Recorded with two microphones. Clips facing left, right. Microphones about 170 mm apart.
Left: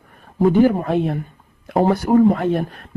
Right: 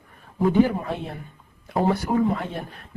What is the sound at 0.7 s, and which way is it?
Speech, 55° left (ahead or behind).